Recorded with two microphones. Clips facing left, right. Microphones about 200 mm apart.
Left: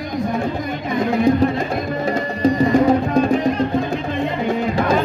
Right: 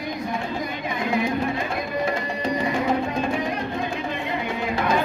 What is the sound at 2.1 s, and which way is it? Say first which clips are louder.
Music: left 7 dB; 40° left (ahead or behind).